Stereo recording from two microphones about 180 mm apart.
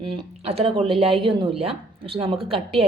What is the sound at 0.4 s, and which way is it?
A woman's voice, 35° right (ahead or behind).